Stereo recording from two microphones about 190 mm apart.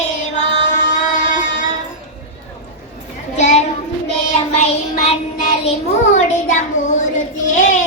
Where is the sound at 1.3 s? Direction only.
45° left (ahead or behind).